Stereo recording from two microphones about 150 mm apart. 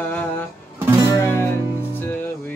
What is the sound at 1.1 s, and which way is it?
Music, 20° left (ahead or behind).